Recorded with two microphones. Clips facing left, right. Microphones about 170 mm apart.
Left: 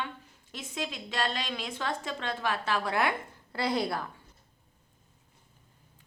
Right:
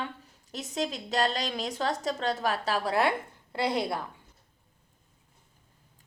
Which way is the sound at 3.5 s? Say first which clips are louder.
Right 1 dB; 20° right (ahead or behind).